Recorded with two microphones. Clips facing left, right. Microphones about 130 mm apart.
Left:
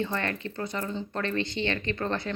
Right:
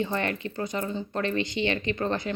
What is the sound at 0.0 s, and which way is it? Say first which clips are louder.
A woman's voice: right 2 dB; 15° right (ahead or behind).